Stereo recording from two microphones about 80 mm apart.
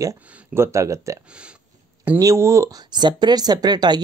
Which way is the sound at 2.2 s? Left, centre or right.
Right.